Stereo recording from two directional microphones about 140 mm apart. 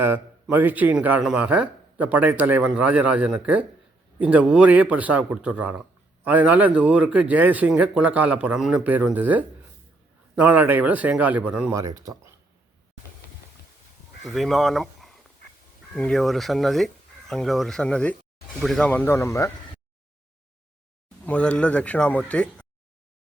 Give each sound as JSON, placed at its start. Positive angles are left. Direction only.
{"t": 0.5, "sound": "speech", "side_deg": -10}
{"t": 11.7, "sound": "speech", "side_deg": -25}
{"t": 14.3, "sound": "speech", "side_deg": 0}
{"t": 21.2, "sound": "speech", "side_deg": 10}